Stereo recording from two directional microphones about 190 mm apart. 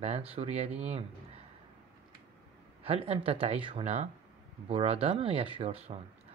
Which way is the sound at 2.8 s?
30° right (ahead or behind).